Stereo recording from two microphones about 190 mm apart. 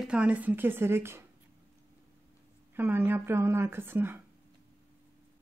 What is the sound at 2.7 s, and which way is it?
A man's voice, 10° right (ahead or behind).